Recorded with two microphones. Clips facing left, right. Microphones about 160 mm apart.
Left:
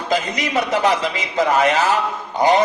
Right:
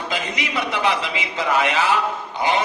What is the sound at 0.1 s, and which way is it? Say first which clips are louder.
A man's voice: left 8 dB; 40° left (ahead or behind).